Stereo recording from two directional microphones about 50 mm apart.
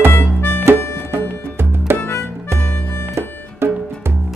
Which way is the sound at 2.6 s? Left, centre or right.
Left.